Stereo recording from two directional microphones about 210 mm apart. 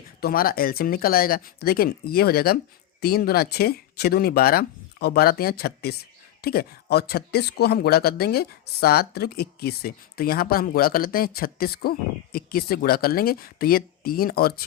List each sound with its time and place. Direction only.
0.2 s speech: 45° left (ahead or behind)